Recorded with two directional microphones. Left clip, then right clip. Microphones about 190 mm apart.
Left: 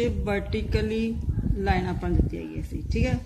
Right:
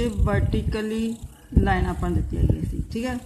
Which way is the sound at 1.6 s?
15° right (ahead or behind).